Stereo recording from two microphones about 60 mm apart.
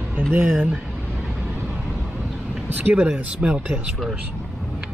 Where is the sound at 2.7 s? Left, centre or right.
Right.